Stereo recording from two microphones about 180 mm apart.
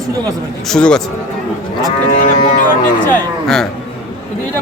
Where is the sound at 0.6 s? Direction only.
5° left (ahead or behind).